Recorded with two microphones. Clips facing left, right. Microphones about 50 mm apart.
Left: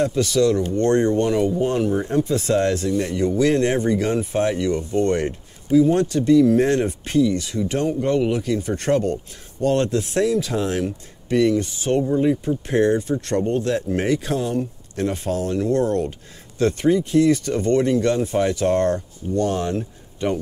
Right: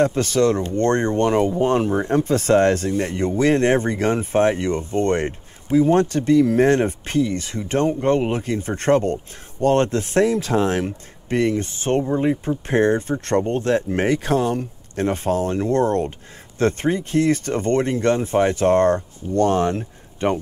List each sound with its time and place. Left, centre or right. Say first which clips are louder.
0.0 s speech: right 1 dB; right